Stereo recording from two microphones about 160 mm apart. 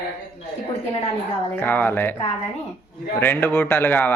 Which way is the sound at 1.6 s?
10° left (ahead or behind).